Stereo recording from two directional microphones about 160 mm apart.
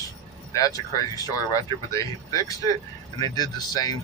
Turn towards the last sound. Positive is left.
turn(degrees=25)  # may be behind; listen again after turning